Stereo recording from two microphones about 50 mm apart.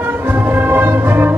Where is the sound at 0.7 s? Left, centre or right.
Right.